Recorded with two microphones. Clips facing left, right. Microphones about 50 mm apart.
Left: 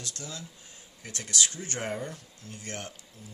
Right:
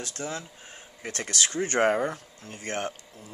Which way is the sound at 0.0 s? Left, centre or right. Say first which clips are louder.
Right 7 dB; right.